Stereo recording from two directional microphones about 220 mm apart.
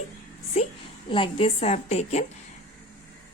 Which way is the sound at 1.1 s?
25° left (ahead or behind).